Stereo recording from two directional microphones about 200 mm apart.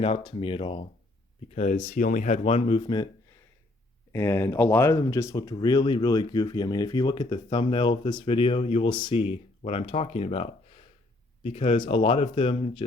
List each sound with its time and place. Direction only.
0.0 s speech: 25° left (ahead or behind)
4.1 s speech: 15° left (ahead or behind)